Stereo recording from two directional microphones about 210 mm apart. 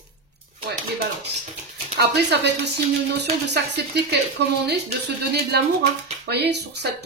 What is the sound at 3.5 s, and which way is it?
A woman's voice, 50° right (ahead or behind).